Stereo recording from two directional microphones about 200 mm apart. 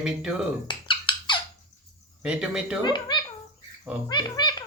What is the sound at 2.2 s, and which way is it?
Speech, 5° right (ahead or behind).